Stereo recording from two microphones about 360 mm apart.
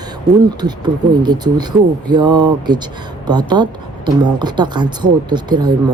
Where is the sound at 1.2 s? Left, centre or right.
Centre.